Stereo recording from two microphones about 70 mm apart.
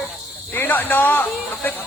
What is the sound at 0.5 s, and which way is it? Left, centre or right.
Speech, left.